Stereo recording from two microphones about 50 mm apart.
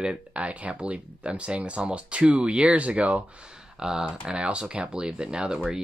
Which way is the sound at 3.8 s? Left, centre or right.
Centre.